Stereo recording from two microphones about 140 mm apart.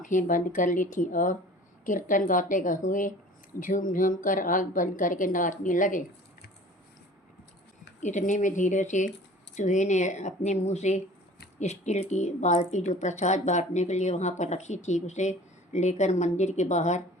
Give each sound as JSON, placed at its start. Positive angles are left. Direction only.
{"t": 0.0, "sound": "a woman's voice", "side_deg": 65}
{"t": 8.0, "sound": "speech", "side_deg": 60}